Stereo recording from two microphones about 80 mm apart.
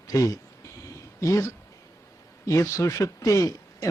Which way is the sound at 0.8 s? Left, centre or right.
Left.